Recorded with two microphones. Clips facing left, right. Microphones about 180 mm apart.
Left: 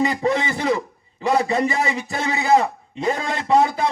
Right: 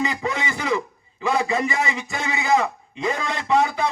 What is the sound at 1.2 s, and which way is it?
A man's voice, 35° left (ahead or behind).